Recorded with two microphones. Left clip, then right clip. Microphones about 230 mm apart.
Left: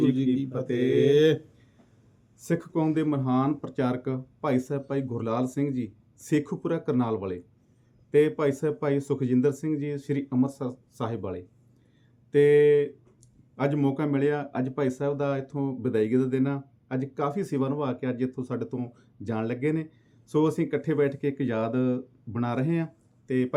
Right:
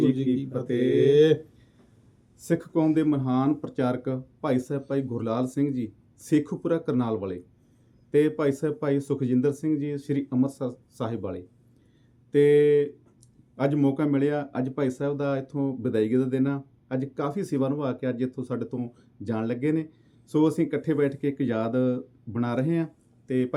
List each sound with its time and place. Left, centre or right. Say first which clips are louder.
0.7 s speech: right 1 dB; centre
1.0 s speech: right 2 dB; left
2.4 s speech: right 3 dB; centre